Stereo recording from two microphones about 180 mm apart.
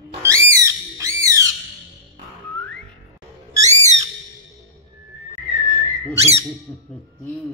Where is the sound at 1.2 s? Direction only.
20° right (ahead or behind).